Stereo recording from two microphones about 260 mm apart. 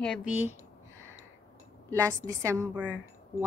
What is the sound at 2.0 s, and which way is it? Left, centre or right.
A woman's voice, centre.